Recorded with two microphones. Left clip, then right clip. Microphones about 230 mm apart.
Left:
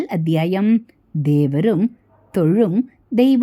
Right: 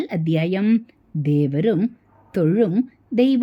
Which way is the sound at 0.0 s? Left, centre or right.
Centre.